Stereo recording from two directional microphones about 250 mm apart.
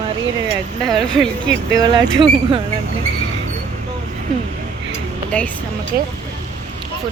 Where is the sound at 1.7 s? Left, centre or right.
Centre.